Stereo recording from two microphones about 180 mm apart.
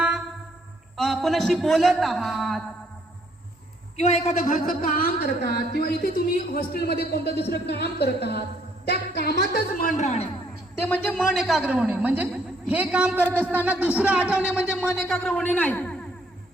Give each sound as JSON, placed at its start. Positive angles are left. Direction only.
{"t": 0.9, "sound": "a man's voice", "side_deg": 0}
{"t": 3.9, "sound": "a woman's voice", "side_deg": 35}
{"t": 10.0, "sound": "speech", "side_deg": 40}
{"t": 10.8, "sound": "a man's voice", "side_deg": 10}